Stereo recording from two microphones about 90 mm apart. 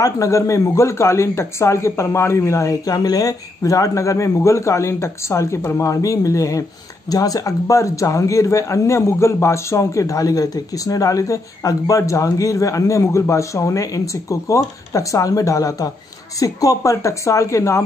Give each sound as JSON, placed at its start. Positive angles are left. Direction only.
{"t": 0.0, "sound": "a man's voice", "side_deg": 35}